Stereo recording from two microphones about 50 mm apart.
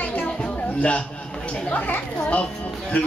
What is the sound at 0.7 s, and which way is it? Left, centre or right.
A man's voice, left.